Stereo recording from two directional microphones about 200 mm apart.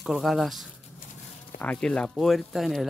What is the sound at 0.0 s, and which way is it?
Speech, centre (ahead or behind).